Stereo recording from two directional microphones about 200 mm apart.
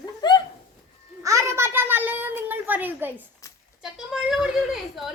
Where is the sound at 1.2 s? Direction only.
15° right (ahead or behind).